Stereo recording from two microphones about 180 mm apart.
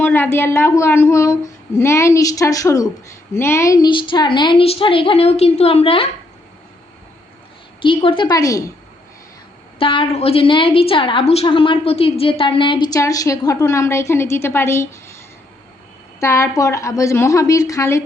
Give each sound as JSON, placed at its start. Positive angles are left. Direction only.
{"t": 0.0, "sound": "a woman's voice", "side_deg": 10}
{"t": 7.8, "sound": "a woman's voice", "side_deg": 30}
{"t": 9.7, "sound": "a woman's voice", "side_deg": 30}
{"t": 16.2, "sound": "speech", "side_deg": 15}